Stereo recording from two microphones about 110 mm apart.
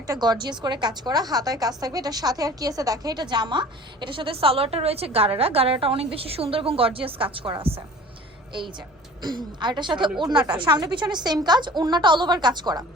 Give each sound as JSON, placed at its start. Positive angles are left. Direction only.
{"t": 0.1, "sound": "a woman's voice", "side_deg": -40}
{"t": 9.2, "sound": "a woman's voice", "side_deg": -40}